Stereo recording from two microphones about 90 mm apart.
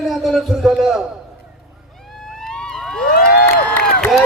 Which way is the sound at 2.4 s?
5° left (ahead or behind).